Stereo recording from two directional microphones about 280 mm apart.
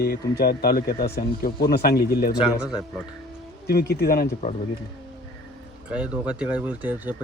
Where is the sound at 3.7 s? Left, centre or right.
Left.